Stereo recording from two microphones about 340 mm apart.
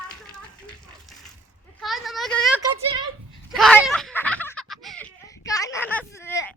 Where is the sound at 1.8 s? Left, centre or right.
Centre.